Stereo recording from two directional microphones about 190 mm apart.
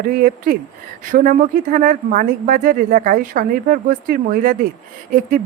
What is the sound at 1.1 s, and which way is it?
Speech, 45° right (ahead or behind).